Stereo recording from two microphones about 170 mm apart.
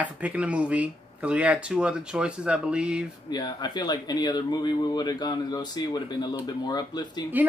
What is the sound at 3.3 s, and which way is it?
Speech, 25° left (ahead or behind).